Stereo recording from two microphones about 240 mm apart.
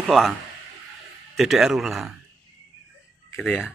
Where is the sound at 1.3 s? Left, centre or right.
Centre.